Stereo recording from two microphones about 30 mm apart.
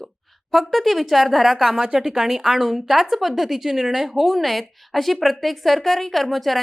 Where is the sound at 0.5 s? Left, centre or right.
Centre.